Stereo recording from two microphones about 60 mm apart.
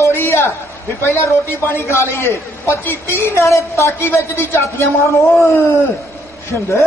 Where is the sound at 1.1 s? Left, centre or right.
Left.